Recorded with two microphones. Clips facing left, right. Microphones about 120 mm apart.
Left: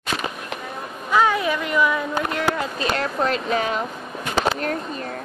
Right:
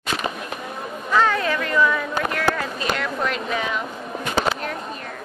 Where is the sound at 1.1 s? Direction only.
15° left (ahead or behind).